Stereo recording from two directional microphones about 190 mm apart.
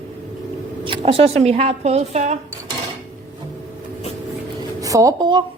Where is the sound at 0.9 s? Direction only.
30° right (ahead or behind).